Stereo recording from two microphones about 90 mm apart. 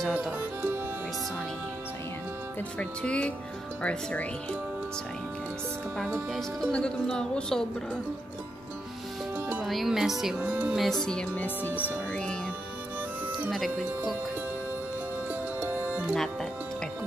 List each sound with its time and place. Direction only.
0.1 s speech: 15° right (ahead or behind)
2.8 s speech: 15° left (ahead or behind)
6.7 s speech: 10° left (ahead or behind)
9.7 s speech: centre (ahead or behind)
10.3 s speech: 20° right (ahead or behind)
10.8 s speech: 5° left (ahead or behind)
12.1 s music: 10° left (ahead or behind)
13.5 s speech: centre (ahead or behind)
15.6 s music: 20° right (ahead or behind)